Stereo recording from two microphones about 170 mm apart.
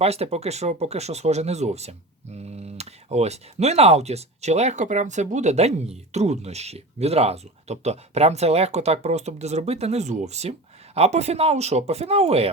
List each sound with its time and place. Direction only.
0.0 s speech: 35° right (ahead or behind)